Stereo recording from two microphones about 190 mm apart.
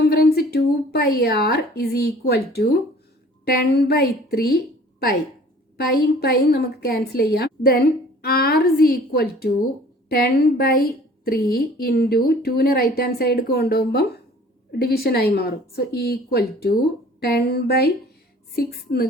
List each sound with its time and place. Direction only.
0.0 s a woman's voice: 55° left (ahead or behind)
5.7 s a woman's voice: 55° left (ahead or behind)